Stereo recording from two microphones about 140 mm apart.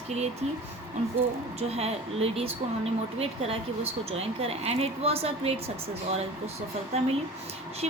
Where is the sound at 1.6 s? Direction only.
45° right (ahead or behind).